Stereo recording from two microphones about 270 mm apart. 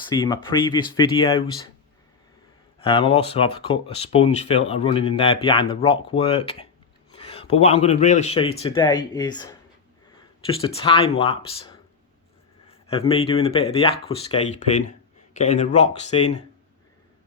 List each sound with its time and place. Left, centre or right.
0.1 s speech: centre
2.8 s speech: centre
12.9 s speech: left